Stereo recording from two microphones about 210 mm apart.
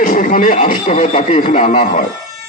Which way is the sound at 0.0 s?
40° left (ahead or behind).